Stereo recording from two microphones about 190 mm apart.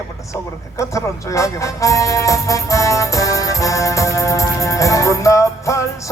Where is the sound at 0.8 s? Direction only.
15° left (ahead or behind).